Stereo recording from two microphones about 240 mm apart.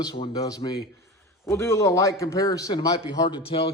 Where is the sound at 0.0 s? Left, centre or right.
Centre.